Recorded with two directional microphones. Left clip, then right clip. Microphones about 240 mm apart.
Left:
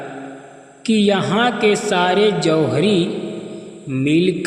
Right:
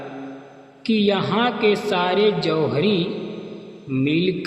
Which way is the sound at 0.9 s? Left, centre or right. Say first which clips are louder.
Left 3 dB; left.